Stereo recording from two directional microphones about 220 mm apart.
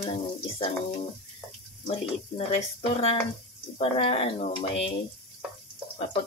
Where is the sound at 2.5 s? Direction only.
25° left (ahead or behind).